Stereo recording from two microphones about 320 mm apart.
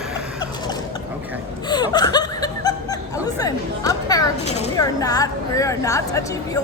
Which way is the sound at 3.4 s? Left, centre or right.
Centre.